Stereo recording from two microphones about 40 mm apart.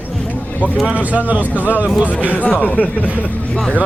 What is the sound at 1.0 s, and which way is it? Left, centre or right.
Speech, right.